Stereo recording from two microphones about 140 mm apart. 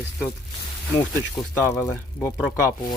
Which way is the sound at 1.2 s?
20° left (ahead or behind).